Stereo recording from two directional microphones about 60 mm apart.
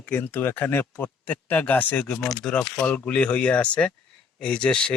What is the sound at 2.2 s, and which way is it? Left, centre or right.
Speech, centre.